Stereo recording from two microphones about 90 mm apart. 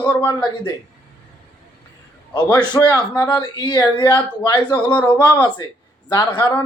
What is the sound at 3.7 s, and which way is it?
Speech, 25° left (ahead or behind).